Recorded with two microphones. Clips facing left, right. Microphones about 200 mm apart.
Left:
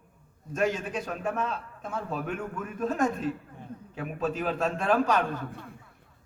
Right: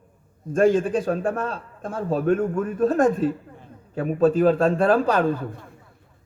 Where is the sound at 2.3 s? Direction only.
50° right (ahead or behind).